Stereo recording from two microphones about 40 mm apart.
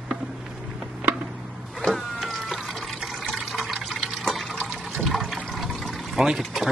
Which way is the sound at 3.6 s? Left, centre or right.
Centre.